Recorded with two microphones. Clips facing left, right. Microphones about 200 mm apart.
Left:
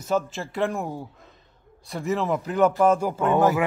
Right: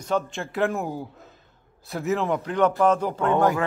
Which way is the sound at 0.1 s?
Centre (ahead or behind).